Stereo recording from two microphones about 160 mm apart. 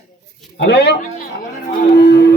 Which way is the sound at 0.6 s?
90° left.